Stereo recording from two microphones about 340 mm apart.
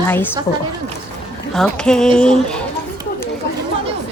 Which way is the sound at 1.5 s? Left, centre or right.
Centre.